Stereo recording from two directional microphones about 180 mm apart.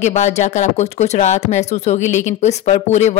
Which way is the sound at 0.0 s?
40° left (ahead or behind).